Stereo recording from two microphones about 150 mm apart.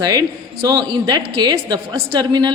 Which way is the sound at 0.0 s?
25° right (ahead or behind).